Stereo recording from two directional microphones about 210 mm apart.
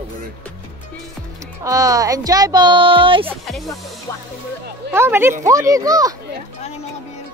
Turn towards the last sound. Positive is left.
turn(degrees=-15)  # may be behind; listen again after turning